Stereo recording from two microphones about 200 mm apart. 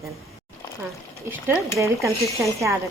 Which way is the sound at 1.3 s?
10° right (ahead or behind).